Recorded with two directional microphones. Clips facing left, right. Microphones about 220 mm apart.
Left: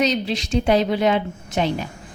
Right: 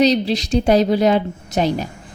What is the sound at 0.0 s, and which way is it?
Speech, 35° right (ahead or behind).